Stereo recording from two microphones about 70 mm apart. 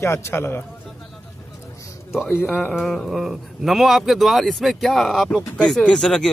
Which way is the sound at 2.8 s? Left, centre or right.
Centre.